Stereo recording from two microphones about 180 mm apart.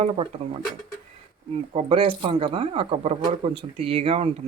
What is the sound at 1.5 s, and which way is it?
Speech, 35° right (ahead or behind).